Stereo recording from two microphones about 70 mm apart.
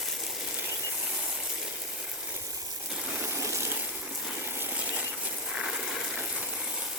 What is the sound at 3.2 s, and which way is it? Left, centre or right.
Water, right.